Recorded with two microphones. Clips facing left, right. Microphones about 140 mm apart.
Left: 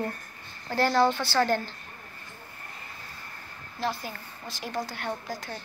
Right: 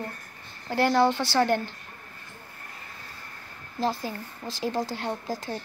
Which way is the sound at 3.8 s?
35° right (ahead or behind).